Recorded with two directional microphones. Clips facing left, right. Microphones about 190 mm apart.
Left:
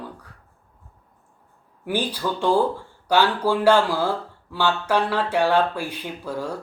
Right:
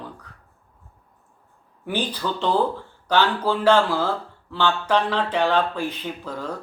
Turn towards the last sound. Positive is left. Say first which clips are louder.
# left 2 dB
turn(degrees=10)  # may be behind; listen again after turning